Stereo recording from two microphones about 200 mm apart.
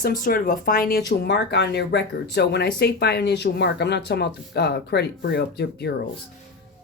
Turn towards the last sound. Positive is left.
turn(degrees=55)  # may be behind; listen again after turning